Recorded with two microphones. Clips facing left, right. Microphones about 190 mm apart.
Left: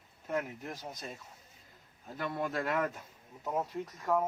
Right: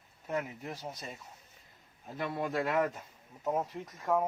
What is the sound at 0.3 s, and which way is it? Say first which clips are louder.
Speech: even; 5° right (ahead or behind).